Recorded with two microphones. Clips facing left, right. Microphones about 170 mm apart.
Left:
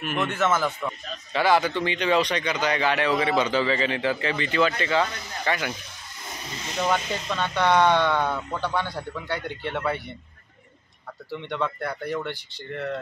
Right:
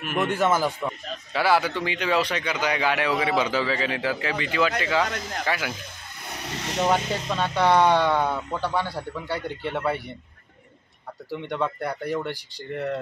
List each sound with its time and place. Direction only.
0.0 s speech: 10° right (ahead or behind)
6.2 s a sound: 70° right (ahead or behind)
6.9 s speech: 5° right (ahead or behind)
11.2 s speech: 10° right (ahead or behind)